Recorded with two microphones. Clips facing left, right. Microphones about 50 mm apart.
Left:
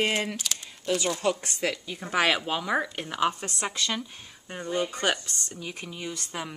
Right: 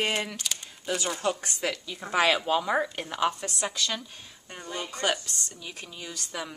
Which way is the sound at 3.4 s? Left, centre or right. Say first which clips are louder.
Even; left.